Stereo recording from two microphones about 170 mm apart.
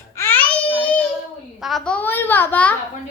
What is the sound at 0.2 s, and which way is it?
Babbling, 10° left (ahead or behind).